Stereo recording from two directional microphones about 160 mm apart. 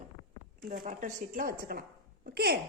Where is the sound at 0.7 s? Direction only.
55° right (ahead or behind); by 2.6 s 80° right.